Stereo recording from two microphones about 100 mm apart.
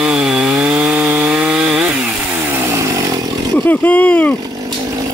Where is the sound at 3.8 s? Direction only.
15° left (ahead or behind).